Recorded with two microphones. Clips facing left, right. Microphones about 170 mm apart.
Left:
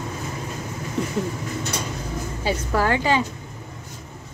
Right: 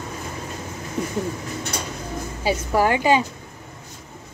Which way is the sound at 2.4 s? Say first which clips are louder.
Right 3 dB; 15° right (ahead or behind).